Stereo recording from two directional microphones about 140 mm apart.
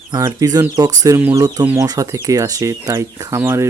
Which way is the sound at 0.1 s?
25° right (ahead or behind).